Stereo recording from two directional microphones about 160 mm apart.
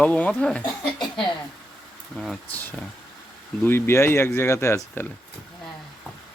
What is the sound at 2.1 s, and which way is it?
Speech, centre (ahead or behind).